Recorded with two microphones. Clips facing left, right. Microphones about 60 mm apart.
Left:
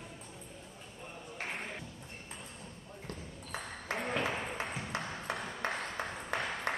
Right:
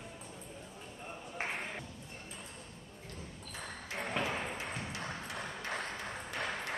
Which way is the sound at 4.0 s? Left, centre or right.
Centre.